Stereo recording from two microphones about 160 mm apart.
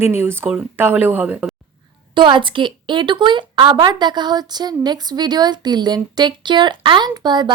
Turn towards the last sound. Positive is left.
turn(degrees=-25)  # may be behind; listen again after turning